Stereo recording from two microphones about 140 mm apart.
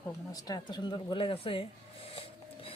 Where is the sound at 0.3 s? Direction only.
25° left (ahead or behind).